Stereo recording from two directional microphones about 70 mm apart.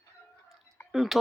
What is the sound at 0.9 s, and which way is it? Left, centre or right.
Speech, centre.